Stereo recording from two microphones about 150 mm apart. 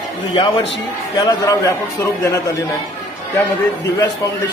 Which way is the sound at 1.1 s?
25° left (ahead or behind).